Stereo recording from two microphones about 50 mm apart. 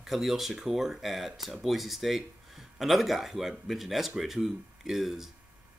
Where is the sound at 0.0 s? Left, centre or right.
Centre.